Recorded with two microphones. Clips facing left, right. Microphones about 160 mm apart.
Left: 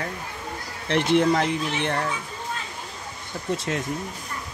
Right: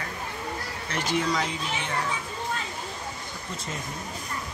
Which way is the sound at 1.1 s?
60° left (ahead or behind).